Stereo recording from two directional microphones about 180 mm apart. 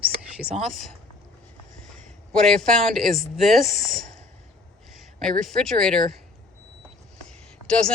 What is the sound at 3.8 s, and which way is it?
Speech, 20° left (ahead or behind).